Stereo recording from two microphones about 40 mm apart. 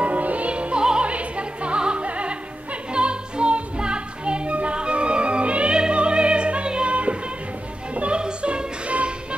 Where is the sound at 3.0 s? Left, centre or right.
Right.